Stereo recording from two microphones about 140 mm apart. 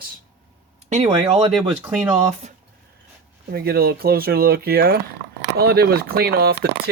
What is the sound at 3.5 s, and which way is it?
Speech, 90° right.